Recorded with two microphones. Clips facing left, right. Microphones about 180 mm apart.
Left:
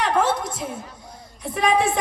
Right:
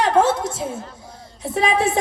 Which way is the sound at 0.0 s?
25° right (ahead or behind).